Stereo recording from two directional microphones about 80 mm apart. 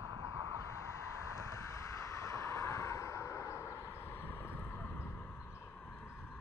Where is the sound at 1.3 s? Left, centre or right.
Left.